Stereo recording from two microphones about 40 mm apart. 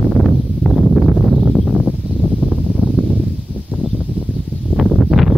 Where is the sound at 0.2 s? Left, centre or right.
Centre.